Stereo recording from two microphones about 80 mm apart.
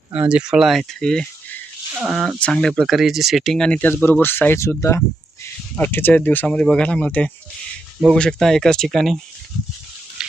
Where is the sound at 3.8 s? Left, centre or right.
Left.